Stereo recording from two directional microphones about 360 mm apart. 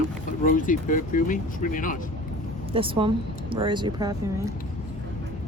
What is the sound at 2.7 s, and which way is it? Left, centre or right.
Speech, centre.